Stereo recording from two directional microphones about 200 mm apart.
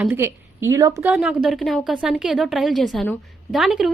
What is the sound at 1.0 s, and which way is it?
Speech, 5° right (ahead or behind).